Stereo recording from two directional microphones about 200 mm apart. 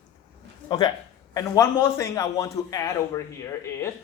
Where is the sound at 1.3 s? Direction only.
15° left (ahead or behind).